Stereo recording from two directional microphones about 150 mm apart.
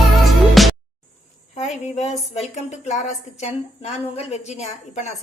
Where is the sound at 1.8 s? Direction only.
50° left (ahead or behind).